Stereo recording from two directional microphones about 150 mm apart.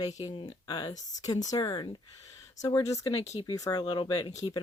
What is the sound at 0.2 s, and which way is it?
Speech, 25° left (ahead or behind).